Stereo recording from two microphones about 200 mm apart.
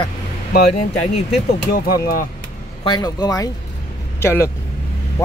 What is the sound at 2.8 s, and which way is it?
Speech, 20° left (ahead or behind).